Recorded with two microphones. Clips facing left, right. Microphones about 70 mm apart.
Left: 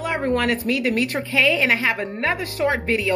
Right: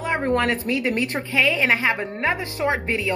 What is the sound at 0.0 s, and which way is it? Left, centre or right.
A woman's voice, right.